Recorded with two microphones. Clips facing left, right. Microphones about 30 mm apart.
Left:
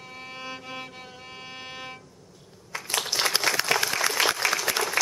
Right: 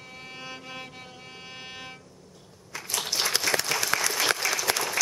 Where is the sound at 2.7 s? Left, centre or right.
Left.